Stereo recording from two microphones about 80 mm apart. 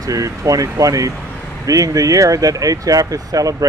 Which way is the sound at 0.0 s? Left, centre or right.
Right.